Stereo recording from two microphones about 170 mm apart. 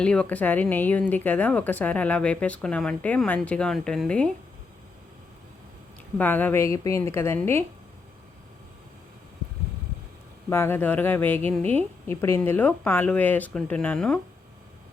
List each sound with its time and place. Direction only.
0.0 s speech: 5° left (ahead or behind)
6.1 s speech: 10° left (ahead or behind)
10.5 s speech: 15° left (ahead or behind)